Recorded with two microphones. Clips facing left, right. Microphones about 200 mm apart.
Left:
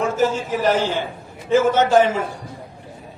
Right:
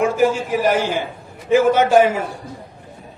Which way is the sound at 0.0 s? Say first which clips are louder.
Right 3 dB; 10° right (ahead or behind).